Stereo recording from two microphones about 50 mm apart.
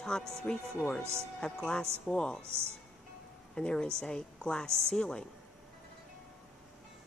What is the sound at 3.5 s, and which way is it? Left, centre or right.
A woman's voice, centre.